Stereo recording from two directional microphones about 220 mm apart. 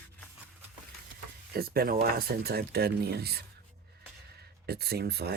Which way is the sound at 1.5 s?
45° right (ahead or behind).